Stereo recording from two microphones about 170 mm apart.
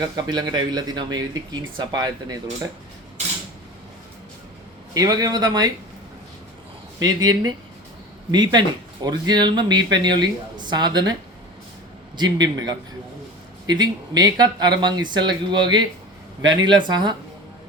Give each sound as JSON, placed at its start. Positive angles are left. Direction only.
{"t": 0.2, "sound": "speech", "side_deg": -25}
{"t": 4.9, "sound": "speech", "side_deg": -20}
{"t": 7.0, "sound": "speech", "side_deg": -20}